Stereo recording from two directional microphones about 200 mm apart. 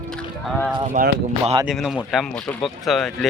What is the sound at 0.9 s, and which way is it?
Speech, 40° right (ahead or behind).